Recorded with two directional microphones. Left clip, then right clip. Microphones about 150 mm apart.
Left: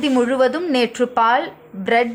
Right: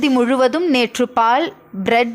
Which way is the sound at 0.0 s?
30° right (ahead or behind).